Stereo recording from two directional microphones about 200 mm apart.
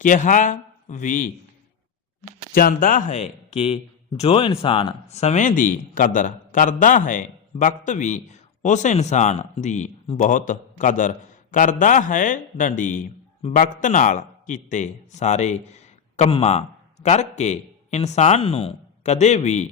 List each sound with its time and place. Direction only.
0.0 s a man's voice: 40° left (ahead or behind)
2.6 s a man's voice: 45° left (ahead or behind)